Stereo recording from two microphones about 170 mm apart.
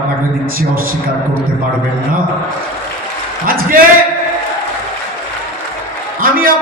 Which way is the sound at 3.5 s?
55° right (ahead or behind).